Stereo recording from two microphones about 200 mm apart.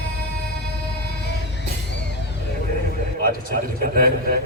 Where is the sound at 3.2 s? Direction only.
45° right (ahead or behind).